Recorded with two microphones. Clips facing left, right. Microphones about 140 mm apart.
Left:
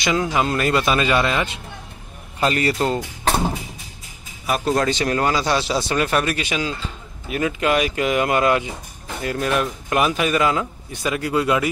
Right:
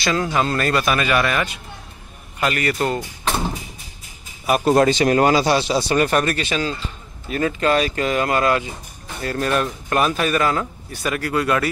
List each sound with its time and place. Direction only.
0.0 s a man's voice: 20° left (ahead or behind)
4.5 s speech: 10° right (ahead or behind)
5.5 s speech: centre (ahead or behind); by 11.7 s 15° left (ahead or behind)